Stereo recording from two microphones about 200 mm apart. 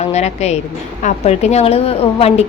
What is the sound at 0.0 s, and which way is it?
A woman's voice, 30° left (ahead or behind).